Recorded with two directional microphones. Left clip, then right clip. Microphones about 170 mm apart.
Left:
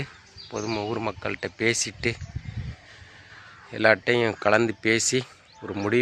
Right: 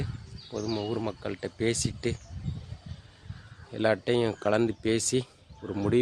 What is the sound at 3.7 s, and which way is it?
Speech, 5° right (ahead or behind).